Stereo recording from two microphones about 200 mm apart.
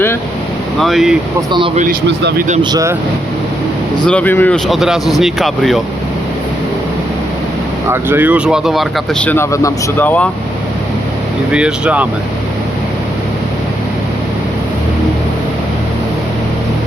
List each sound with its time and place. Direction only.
0.8 s speech: centre (ahead or behind)
1.4 s speech: 25° right (ahead or behind)
1.7 s speech: 40° right (ahead or behind)
2.6 s speech: 20° right (ahead or behind)
4.0 s speech: 5° left (ahead or behind)
7.9 s speech: 10° right (ahead or behind); by 10.2 s 10° left (ahead or behind)
11.5 s speech: 5° right (ahead or behind)